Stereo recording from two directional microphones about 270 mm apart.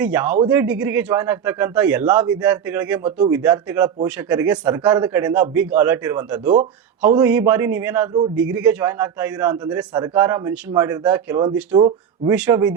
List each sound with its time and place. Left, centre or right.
0.0 s a man's voice: centre
12.3 s a man's voice: centre